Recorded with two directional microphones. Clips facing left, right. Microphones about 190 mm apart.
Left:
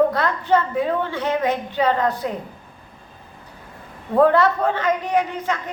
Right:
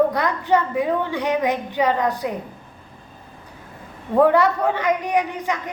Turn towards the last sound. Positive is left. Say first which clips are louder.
# even
turn(degrees=-15)  # may be behind; listen again after turning